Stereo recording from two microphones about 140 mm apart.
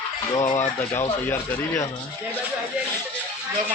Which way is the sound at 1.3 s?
20° left (ahead or behind).